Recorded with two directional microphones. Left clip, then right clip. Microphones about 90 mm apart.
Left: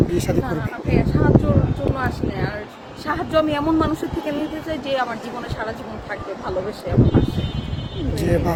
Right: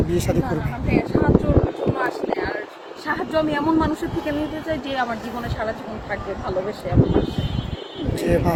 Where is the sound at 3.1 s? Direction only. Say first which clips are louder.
Left 2 dB; 50° left (ahead or behind).